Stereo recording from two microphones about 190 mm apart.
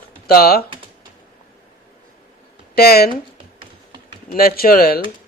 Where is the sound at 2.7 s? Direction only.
55° left (ahead or behind).